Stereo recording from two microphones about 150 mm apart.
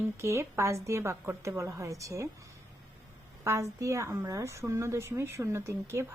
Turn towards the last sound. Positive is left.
turn(degrees=-20)  # may be behind; listen again after turning